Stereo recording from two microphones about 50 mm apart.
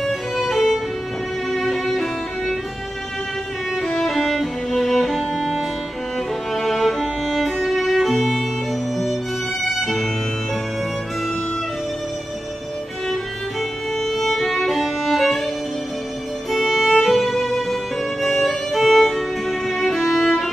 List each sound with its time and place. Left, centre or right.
0.0 s music: centre
3.8 s music: centre
9.8 s violin: centre
13.1 s music: centre
16.4 s music: centre